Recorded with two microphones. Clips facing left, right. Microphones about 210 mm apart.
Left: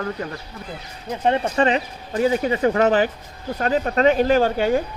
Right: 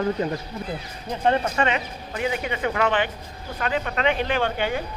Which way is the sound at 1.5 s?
35° left (ahead or behind).